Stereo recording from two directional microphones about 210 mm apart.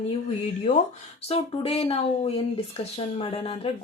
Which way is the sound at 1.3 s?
25° left (ahead or behind).